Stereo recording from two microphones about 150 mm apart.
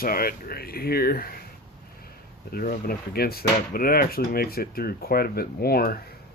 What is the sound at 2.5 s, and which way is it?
Speech, 90° left.